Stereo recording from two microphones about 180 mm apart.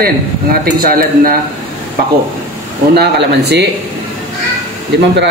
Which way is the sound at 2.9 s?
65° right (ahead or behind).